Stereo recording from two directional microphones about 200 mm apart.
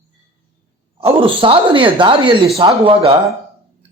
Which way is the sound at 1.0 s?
25° right (ahead or behind).